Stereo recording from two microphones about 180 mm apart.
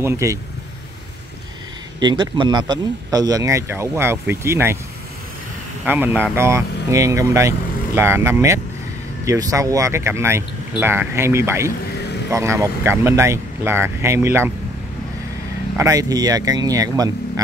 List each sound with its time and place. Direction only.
0.0 s speech: 15° right (ahead or behind)
2.0 s speech: 25° right (ahead or behind)
5.9 s speech: 10° right (ahead or behind)
15.8 s speech: 20° right (ahead or behind)